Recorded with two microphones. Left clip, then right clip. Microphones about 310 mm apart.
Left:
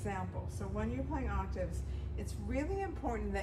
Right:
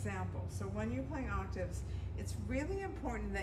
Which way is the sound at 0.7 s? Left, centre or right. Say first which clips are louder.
Left 2 dB; centre.